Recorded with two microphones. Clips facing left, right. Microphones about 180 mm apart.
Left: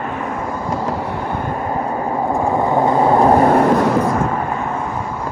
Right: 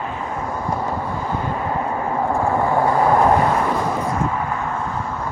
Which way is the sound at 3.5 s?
70° left (ahead or behind).